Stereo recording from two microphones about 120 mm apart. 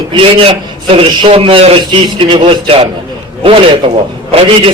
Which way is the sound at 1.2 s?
50° right (ahead or behind).